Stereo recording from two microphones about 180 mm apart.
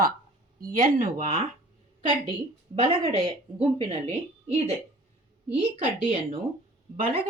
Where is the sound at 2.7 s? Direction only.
30° right (ahead or behind).